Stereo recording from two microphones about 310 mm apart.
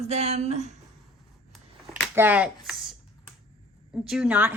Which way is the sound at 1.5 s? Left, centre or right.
Centre.